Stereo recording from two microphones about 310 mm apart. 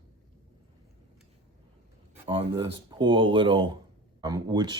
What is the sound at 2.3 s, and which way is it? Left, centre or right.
Speech, centre.